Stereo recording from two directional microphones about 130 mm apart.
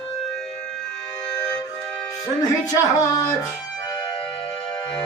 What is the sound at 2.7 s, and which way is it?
Music, 30° left (ahead or behind).